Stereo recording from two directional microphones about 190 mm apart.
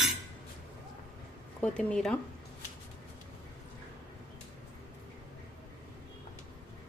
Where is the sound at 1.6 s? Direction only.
5° left (ahead or behind).